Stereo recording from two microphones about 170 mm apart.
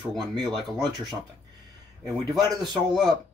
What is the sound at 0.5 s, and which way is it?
Speech, 25° right (ahead or behind).